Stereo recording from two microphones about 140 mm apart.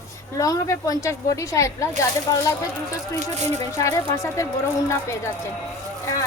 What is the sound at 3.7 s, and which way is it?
A woman's voice, 20° left (ahead or behind).